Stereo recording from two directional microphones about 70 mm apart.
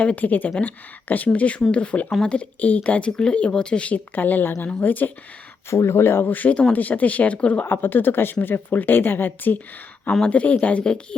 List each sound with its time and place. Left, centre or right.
0.0 s speech: left
5.7 s speech: left; by 7.6 s centre
7.6 s speech: left
10.1 s speech: centre